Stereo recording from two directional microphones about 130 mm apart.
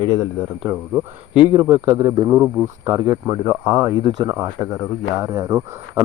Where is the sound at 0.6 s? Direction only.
10° right (ahead or behind); by 4.3 s 35° right (ahead or behind).